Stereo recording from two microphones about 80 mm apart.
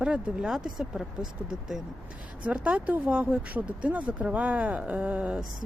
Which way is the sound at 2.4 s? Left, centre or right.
Centre.